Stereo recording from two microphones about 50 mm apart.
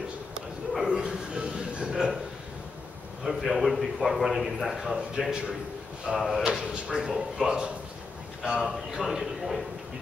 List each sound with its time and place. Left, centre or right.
0.8 s a sound: centre
3.3 s a man's voice: centre
6.1 s a man's voice: centre
6.7 s a man's voice: centre